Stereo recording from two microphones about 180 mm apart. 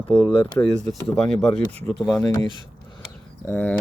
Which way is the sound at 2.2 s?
15° left (ahead or behind).